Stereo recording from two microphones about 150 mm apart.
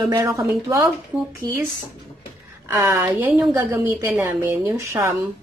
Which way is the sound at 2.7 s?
25° right (ahead or behind).